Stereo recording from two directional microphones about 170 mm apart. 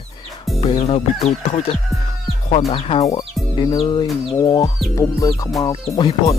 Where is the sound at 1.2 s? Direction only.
40° left (ahead or behind).